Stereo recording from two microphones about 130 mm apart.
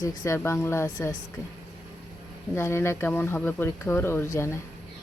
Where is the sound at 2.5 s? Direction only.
20° left (ahead or behind).